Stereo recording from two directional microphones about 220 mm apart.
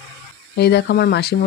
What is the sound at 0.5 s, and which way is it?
Speech, 50° left (ahead or behind).